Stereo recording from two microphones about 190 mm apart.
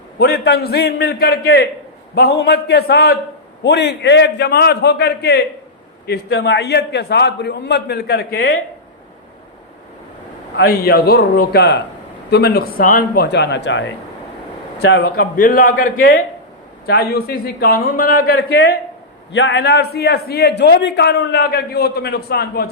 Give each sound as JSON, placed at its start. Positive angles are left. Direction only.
{"t": 0.2, "sound": "a man's voice", "side_deg": 55}
{"t": 10.7, "sound": "a man's voice", "side_deg": 55}
{"t": 19.3, "sound": "a man's voice", "side_deg": 75}